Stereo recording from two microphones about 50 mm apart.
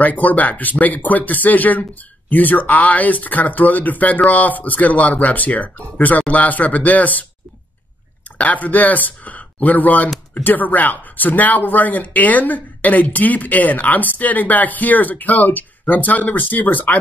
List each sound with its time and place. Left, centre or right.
0.0 s speech: left
8.4 s speech: left